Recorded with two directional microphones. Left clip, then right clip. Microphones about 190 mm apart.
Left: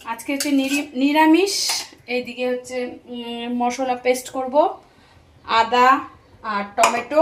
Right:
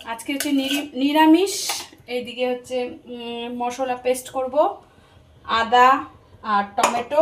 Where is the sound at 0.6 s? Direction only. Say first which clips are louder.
Left 2 dB; 10° left (ahead or behind); by 5.9 s 25° left (ahead or behind).